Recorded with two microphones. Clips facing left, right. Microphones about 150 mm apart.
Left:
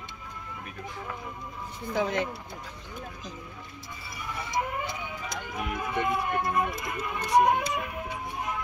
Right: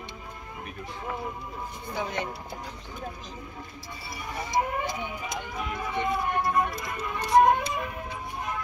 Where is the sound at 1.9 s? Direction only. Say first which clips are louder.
Left 5 dB; 90° left.